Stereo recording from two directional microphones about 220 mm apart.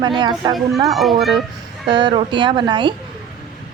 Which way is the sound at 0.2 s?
20° right (ahead or behind).